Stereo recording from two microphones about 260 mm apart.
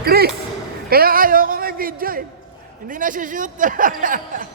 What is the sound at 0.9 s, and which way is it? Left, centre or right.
Music, right.